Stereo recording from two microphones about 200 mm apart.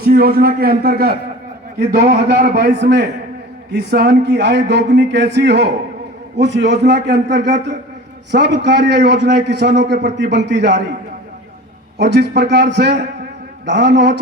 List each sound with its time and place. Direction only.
0.0 s a man's voice: 50° right (ahead or behind)
11.9 s a man's voice: 55° right (ahead or behind)